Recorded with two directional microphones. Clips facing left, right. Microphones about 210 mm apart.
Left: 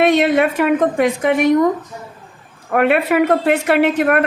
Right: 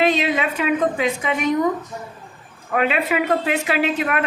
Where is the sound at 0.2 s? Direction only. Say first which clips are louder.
Left 7 dB; 60° left (ahead or behind).